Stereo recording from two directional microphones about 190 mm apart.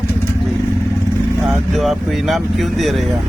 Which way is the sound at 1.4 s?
Centre (ahead or behind).